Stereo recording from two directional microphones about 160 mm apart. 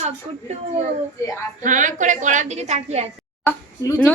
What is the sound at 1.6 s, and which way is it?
A woman's voice, 50° right (ahead or behind).